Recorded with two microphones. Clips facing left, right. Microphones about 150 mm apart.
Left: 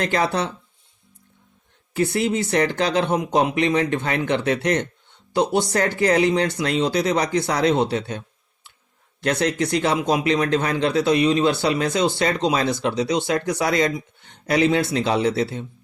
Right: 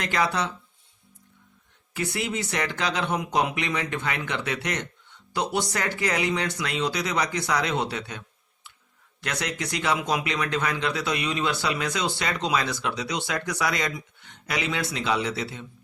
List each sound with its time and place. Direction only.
0.0 s speech: 35° left (ahead or behind)
1.9 s speech: 30° left (ahead or behind)
9.2 s speech: 30° left (ahead or behind)